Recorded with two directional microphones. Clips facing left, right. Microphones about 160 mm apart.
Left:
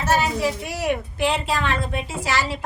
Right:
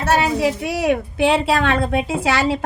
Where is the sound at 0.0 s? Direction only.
70° right (ahead or behind).